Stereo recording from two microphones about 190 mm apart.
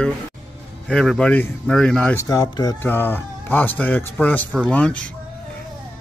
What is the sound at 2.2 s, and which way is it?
Speech, 20° left (ahead or behind).